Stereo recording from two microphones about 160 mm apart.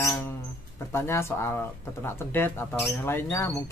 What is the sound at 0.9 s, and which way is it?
Speech, 15° left (ahead or behind).